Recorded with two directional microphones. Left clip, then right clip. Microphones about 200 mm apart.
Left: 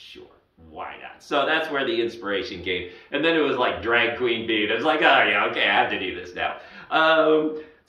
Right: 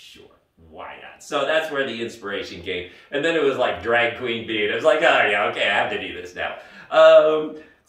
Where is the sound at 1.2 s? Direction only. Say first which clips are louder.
Right 1 dB; 15° right (ahead or behind).